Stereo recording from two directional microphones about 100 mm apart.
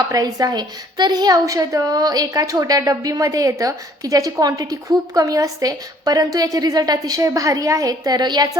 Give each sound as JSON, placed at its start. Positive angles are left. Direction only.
{"t": 0.1, "sound": "a woman's voice", "side_deg": -40}